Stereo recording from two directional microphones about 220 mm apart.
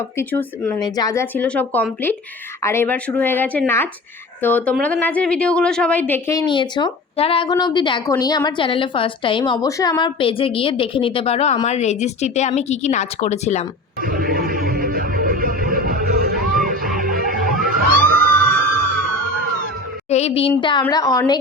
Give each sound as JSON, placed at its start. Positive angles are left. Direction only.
{"t": 0.2, "sound": "a woman's voice", "side_deg": 10}
{"t": 14.0, "sound": "music", "side_deg": -40}
{"t": 20.1, "sound": "a woman's voice", "side_deg": 30}